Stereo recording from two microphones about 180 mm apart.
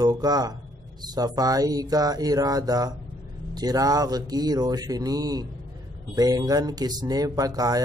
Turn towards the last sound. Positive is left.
turn(degrees=-20)  # may be behind; listen again after turning